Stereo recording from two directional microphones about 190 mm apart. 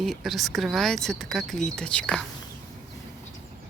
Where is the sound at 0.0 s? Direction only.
Centre (ahead or behind).